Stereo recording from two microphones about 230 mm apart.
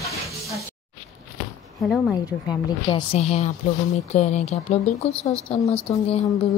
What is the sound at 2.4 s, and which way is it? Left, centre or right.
Speech, left.